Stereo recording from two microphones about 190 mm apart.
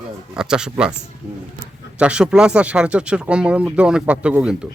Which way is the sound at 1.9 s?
5° right (ahead or behind).